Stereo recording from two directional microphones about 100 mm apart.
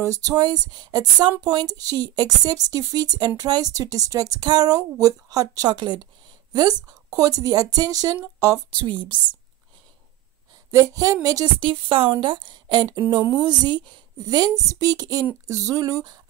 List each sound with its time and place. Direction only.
0.0 s speech: 35° right (ahead or behind)
8.7 s a woman's voice: 55° right (ahead or behind)
10.7 s speech: 35° right (ahead or behind)
11.6 s a woman's voice: 60° right (ahead or behind); by 16.2 s 40° right (ahead or behind)